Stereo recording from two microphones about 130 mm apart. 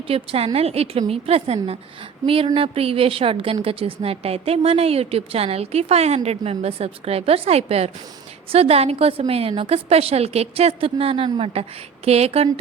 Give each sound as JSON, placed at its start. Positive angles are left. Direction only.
{"t": 0.1, "sound": "a woman's voice", "side_deg": -50}